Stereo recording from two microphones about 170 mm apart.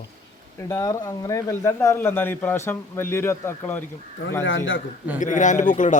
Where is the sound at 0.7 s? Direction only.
20° left (ahead or behind).